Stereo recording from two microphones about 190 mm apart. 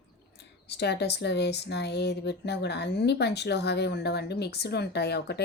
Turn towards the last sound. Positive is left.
turn(degrees=60)  # may be behind; listen again after turning